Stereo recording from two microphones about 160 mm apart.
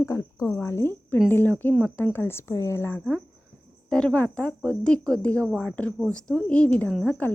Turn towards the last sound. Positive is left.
turn(degrees=5)  # may be behind; listen again after turning